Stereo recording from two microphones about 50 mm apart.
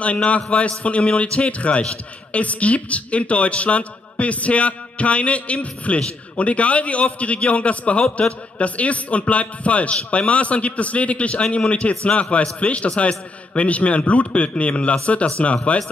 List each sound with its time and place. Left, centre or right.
0.0 s a man's voice: left